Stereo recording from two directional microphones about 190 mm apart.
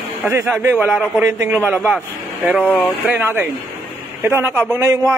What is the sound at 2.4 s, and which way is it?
Speech, 5° left (ahead or behind).